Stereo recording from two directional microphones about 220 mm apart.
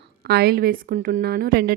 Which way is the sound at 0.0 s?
50° right (ahead or behind).